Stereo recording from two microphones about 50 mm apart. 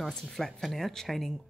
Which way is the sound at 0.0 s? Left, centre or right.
Centre.